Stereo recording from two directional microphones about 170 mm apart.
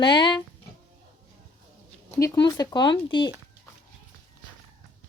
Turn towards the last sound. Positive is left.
turn(degrees=25)  # may be behind; listen again after turning